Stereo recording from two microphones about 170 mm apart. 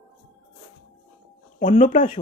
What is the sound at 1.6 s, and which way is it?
Speech, 45° left (ahead or behind).